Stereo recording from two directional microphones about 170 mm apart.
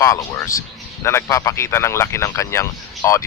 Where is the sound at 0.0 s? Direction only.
20° left (ahead or behind).